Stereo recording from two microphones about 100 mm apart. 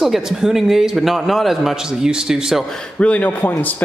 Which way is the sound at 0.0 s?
5° right (ahead or behind).